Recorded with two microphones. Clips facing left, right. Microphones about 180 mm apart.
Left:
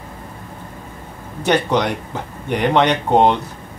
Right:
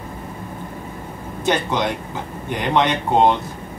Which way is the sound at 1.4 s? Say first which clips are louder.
Left 3 dB; 70° left (ahead or behind).